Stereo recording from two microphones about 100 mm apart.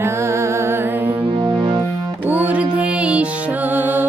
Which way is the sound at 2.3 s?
15° right (ahead or behind).